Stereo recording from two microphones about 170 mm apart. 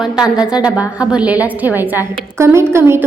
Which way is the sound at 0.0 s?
5° right (ahead or behind).